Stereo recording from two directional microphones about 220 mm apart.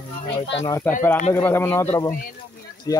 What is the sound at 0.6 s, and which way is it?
Speech, 15° left (ahead or behind).